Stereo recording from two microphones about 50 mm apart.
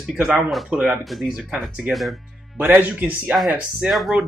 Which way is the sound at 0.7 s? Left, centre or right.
Centre.